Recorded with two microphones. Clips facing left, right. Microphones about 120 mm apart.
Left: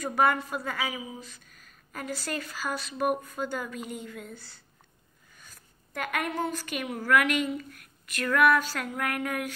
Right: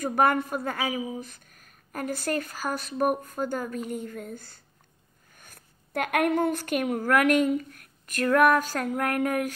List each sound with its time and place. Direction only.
0.0 s a woman's voice: 50° right (ahead or behind)